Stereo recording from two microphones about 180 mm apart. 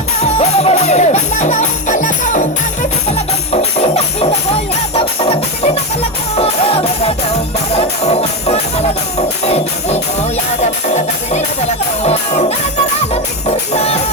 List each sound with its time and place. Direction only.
0.2 s music: 35° left (ahead or behind)